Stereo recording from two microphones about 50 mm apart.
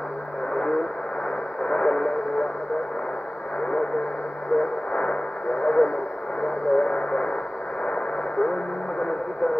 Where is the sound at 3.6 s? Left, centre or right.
Centre.